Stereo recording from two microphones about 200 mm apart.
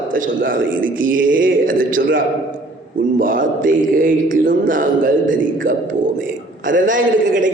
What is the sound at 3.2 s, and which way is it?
A man's voice, 45° right (ahead or behind).